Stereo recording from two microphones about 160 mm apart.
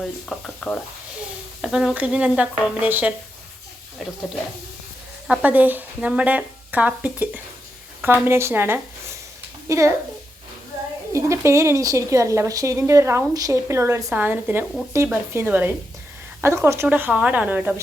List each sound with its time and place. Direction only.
0.0 s speech: 5° left (ahead or behind)
5.3 s a woman's voice: 10° right (ahead or behind)
11.1 s a woman's voice: 20° right (ahead or behind)